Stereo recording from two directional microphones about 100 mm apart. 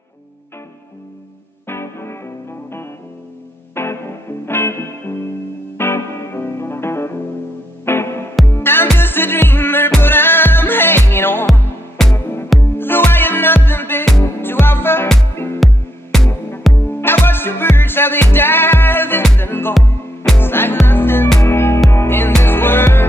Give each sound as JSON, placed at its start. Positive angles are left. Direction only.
{"t": 1.7, "sound": "music", "side_deg": 25}
{"t": 3.7, "sound": "music", "side_deg": 25}
{"t": 12.0, "sound": "music", "side_deg": 5}
{"t": 12.6, "sound": "music", "side_deg": 20}
{"t": 15.6, "sound": "music", "side_deg": 5}
{"t": 16.3, "sound": "music", "side_deg": 25}